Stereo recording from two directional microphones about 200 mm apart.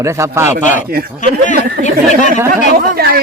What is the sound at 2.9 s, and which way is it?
Speech, 50° right (ahead or behind).